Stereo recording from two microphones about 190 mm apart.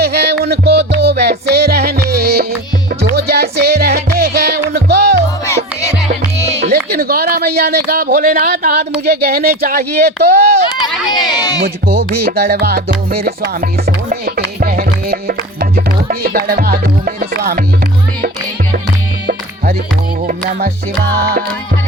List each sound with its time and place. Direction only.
0.0 s music: 55° right (ahead or behind)
6.6 s a sound: 55° right (ahead or behind)
9.0 s speech: 55° right (ahead or behind)
11.2 s a man's voice: 20° left (ahead or behind)
11.6 s music: 55° right (ahead or behind)